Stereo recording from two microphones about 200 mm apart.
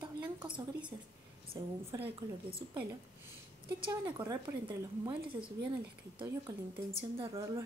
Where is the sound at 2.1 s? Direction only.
30° right (ahead or behind).